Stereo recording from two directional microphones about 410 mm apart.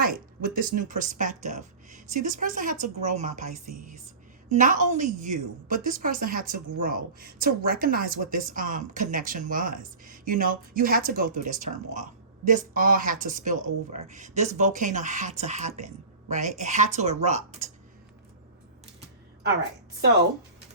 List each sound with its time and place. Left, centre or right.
0.0 s a woman's voice: centre
3.7 s speech: right
4.5 s a woman's voice: centre